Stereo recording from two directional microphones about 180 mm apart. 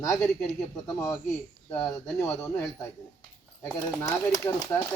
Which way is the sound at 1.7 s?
15° left (ahead or behind).